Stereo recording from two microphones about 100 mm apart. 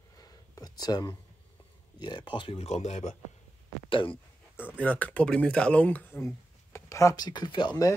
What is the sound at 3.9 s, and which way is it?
Speech, 60° left (ahead or behind).